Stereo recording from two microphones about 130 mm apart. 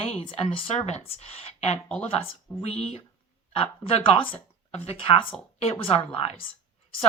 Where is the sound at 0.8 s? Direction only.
55° left (ahead or behind).